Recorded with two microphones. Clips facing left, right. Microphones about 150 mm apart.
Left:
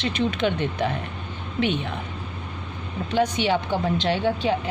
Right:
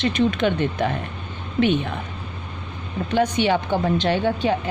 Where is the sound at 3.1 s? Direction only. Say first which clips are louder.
Right 2 dB; 50° right (ahead or behind).